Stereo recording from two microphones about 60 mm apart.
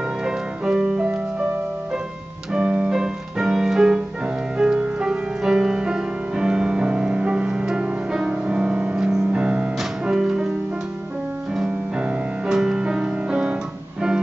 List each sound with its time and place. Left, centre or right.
0.2 s music: centre
2.5 s piano: centre
2.9 s music: centre
11.5 s music: centre